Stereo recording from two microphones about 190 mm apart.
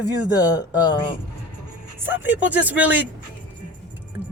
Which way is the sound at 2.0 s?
10° right (ahead or behind).